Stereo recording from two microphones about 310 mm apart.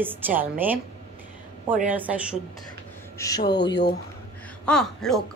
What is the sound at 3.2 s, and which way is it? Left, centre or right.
Speech, centre.